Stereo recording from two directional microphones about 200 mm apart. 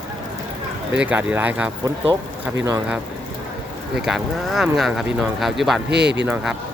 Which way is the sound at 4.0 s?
Centre (ahead or behind).